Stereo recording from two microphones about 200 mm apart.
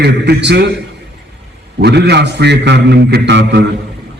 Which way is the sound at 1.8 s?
55° right (ahead or behind).